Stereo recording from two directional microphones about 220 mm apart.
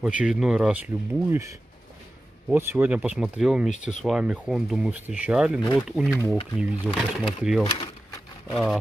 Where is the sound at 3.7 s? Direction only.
35° left (ahead or behind).